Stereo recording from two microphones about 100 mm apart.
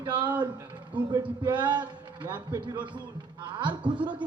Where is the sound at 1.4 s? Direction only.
50° right (ahead or behind).